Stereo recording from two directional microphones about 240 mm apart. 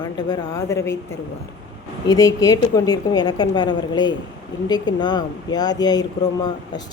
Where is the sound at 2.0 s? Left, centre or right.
Centre.